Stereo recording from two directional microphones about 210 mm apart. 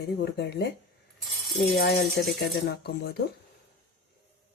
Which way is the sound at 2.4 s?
50° left (ahead or behind).